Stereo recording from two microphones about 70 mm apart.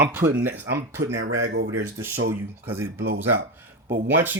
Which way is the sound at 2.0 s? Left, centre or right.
Right.